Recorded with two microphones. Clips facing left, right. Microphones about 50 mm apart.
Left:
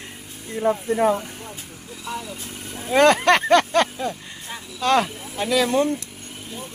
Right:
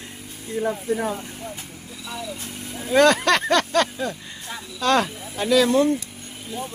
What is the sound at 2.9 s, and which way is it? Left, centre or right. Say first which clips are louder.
Speech: left 1 dB; centre.